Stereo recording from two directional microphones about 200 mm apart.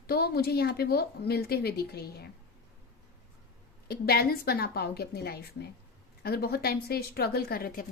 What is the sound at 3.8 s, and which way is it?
A woman's voice, 50° left (ahead or behind).